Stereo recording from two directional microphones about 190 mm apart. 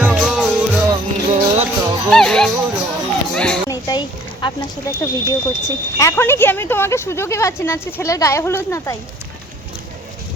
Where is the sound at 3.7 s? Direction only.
20° left (ahead or behind).